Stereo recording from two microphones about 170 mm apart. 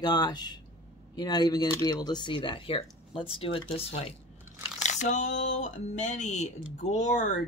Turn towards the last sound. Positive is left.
turn(degrees=45)  # may be behind; listen again after turning